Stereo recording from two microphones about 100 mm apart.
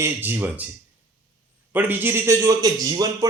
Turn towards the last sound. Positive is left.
turn(degrees=-35)  # may be behind; listen again after turning